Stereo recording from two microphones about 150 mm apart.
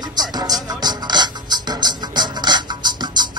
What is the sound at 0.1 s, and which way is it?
Music, 25° right (ahead or behind).